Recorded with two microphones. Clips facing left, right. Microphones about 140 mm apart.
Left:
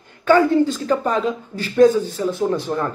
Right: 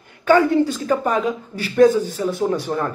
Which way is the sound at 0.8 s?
10° right (ahead or behind).